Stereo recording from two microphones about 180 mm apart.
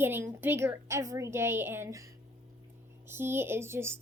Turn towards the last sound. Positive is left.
turn(degrees=-15)  # may be behind; listen again after turning